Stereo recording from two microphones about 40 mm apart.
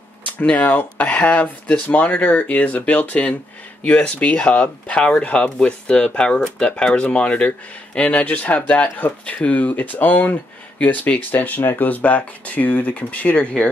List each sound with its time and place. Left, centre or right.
0.4 s speech: left
0.9 s speech: left
8.0 s speech: left
9.6 s speech: left